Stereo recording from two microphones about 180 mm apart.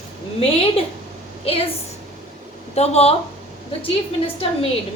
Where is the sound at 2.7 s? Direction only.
35° left (ahead or behind).